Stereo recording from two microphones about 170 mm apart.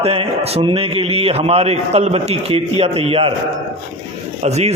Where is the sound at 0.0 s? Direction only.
35° right (ahead or behind).